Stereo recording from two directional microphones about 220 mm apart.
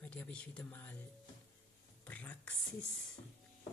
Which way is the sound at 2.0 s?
5° left (ahead or behind).